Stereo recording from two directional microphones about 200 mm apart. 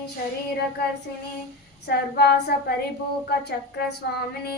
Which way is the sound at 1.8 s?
55° left (ahead or behind).